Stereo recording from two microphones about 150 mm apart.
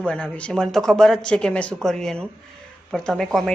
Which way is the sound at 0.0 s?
5° left (ahead or behind).